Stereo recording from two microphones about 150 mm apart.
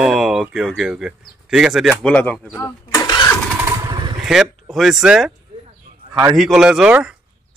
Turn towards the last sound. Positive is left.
turn(degrees=-5)  # may be behind; listen again after turning